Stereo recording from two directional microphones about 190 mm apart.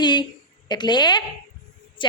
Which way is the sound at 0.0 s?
25° left (ahead or behind).